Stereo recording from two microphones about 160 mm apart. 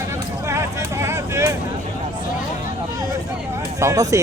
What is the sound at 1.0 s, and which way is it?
Vehicle, 15° right (ahead or behind).